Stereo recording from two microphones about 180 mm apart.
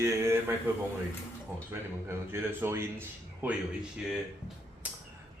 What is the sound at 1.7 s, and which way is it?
Speech, 15° right (ahead or behind).